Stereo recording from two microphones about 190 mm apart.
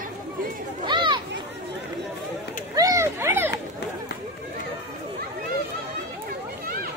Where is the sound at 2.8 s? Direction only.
15° right (ahead or behind).